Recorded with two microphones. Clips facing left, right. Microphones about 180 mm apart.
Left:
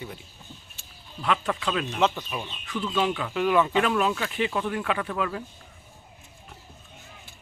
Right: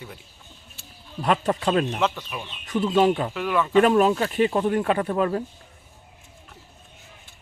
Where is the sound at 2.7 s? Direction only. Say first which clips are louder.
Right 7 dB; 40° right (ahead or behind).